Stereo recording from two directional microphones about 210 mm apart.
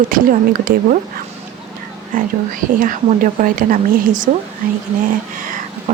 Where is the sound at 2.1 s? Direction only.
40° right (ahead or behind).